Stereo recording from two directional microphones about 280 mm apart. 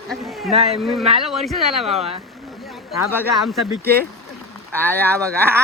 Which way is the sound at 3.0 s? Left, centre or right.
Centre.